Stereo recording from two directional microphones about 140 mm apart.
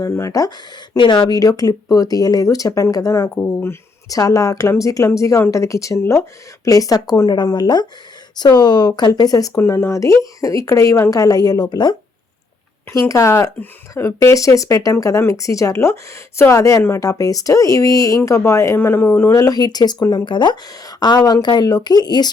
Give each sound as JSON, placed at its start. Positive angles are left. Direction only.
{"t": 0.0, "sound": "speech", "side_deg": 25}